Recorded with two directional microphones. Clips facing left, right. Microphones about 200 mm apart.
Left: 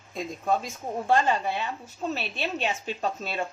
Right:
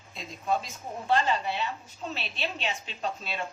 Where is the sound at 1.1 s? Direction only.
50° left (ahead or behind).